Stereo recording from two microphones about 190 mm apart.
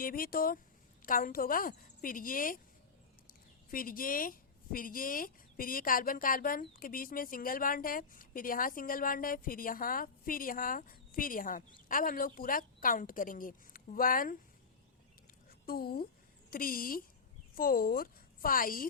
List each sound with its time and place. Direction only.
0.0 s speech: 50° left (ahead or behind)
3.7 s speech: 50° left (ahead or behind)
15.6 s a woman's voice: 55° left (ahead or behind)